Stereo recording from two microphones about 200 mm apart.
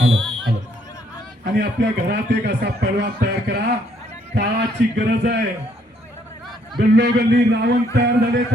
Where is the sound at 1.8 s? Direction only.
55° right (ahead or behind).